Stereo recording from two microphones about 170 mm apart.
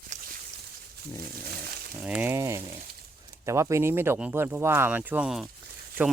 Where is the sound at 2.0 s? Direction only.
10° right (ahead or behind).